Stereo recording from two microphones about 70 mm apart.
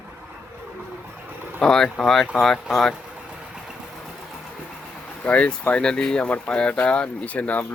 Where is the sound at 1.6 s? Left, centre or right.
Centre.